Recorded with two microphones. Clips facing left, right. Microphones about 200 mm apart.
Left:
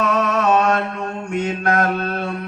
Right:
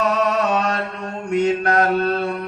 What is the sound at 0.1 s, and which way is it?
Mantra, 55° left (ahead or behind).